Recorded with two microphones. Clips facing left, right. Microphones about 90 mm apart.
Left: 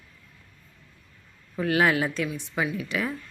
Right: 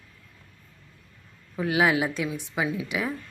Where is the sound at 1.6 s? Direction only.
10° right (ahead or behind).